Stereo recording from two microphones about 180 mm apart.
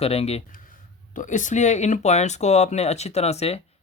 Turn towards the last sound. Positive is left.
turn(degrees=35)  # may be behind; listen again after turning